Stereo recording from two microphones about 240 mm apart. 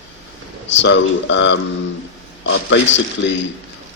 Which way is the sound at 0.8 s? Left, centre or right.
Left.